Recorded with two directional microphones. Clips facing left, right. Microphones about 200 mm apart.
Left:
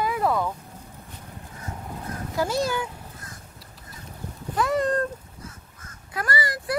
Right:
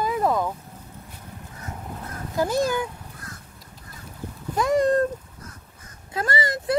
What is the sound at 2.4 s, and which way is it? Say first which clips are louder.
Speech: right 3 dB; 15° right (ahead or behind).